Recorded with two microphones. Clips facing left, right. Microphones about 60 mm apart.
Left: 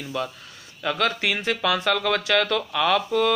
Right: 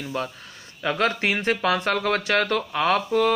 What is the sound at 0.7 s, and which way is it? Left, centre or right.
Speech, right.